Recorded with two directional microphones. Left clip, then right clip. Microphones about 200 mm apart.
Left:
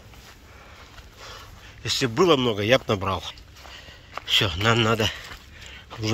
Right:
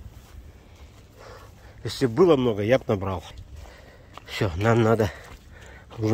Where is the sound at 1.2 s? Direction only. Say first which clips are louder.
Left 3 dB; 25° right (ahead or behind).